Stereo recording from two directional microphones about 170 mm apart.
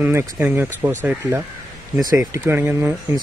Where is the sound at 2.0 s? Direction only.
20° right (ahead or behind).